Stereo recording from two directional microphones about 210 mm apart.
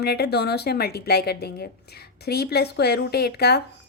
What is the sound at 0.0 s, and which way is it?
A woman's voice, 50° left (ahead or behind).